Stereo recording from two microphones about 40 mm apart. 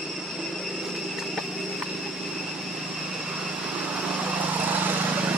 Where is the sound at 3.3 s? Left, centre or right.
Centre.